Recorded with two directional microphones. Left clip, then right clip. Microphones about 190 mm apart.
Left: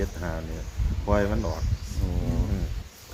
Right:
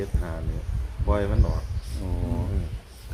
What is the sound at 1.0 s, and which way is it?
Speech, 25° left (ahead or behind).